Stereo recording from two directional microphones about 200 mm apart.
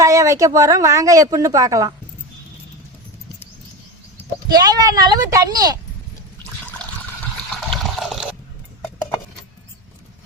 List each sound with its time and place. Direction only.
0.0 s speech: 15° right (ahead or behind)
4.4 s speech: 20° right (ahead or behind)
7.7 s water: centre (ahead or behind)